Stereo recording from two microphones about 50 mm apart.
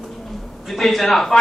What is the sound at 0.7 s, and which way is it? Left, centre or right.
Speech, centre.